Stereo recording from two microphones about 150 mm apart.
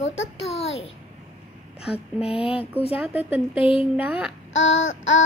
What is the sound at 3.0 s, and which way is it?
Speech, 10° right (ahead or behind).